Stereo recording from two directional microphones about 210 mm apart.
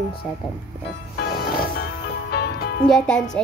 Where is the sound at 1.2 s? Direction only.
50° left (ahead or behind).